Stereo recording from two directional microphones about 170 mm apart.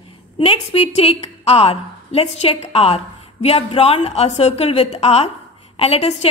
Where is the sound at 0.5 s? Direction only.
35° left (ahead or behind).